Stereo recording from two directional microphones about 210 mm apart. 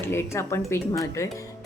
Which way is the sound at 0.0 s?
10° left (ahead or behind).